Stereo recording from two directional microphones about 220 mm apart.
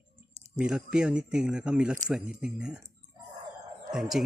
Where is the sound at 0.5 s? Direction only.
5° right (ahead or behind).